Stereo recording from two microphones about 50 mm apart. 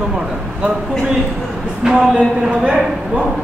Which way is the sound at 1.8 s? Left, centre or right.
Centre.